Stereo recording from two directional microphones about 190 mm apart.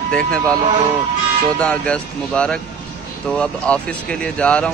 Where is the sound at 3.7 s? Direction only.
5° left (ahead or behind).